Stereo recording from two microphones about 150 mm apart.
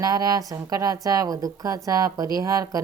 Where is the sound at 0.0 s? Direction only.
25° right (ahead or behind).